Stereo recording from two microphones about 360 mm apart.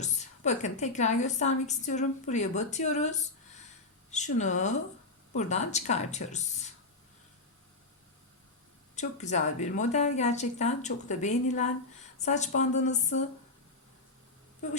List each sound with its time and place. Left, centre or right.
0.0 s a woman's voice: centre
9.0 s a woman's voice: centre